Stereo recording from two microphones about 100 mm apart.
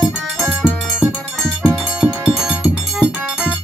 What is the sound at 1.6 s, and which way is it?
Music, 5° right (ahead or behind).